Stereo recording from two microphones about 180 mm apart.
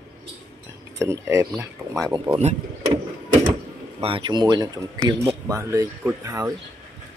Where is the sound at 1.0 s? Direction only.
15° right (ahead or behind).